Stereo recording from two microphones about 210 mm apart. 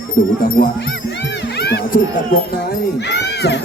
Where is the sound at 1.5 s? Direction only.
50° left (ahead or behind).